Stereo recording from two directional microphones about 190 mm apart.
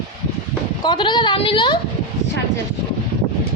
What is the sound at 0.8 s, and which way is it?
Speech, 25° left (ahead or behind).